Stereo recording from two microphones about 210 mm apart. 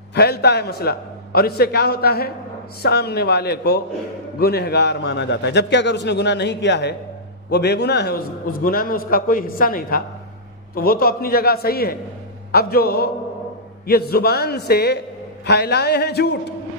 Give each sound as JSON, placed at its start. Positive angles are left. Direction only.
{"t": 0.1, "sound": "a man's voice", "side_deg": 50}